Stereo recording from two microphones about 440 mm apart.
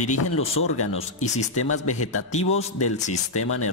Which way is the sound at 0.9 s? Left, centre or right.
Centre.